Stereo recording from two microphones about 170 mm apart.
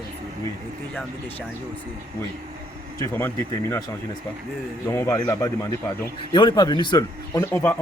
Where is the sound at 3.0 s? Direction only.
15° left (ahead or behind).